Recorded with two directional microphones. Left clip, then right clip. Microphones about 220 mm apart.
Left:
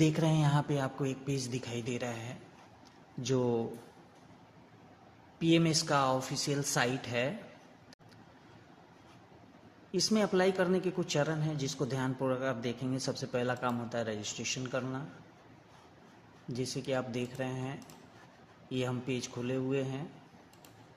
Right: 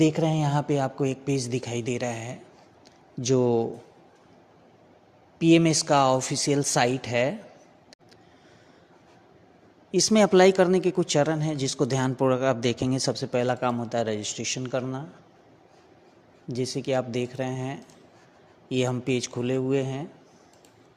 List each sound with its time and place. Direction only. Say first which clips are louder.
0.0 s speech: right 7 dB; 25° right (ahead or behind)
5.4 s speech: right 9 dB; 35° right (ahead or behind)
9.9 s speech: right 10 dB; 40° right (ahead or behind)
16.5 s speech: right 8 dB; 35° right (ahead or behind)